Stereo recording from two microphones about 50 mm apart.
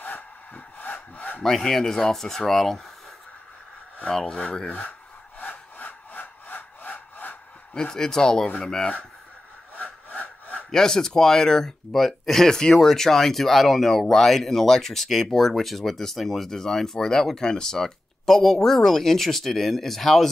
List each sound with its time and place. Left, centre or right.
0.7 s sawing: left
1.4 s speech: centre
4.1 s speech: centre
5.4 s sawing: left
7.7 s speech: centre
10.0 s sawing: left
10.7 s speech: centre